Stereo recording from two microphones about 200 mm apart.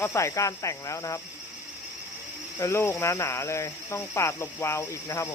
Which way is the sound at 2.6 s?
15° left (ahead or behind).